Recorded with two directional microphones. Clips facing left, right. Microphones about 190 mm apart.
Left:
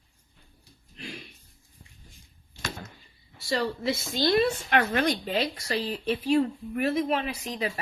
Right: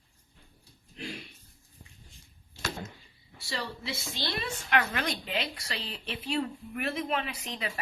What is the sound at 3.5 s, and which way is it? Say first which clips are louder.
Speech: left 9 dB; 45° left (ahead or behind).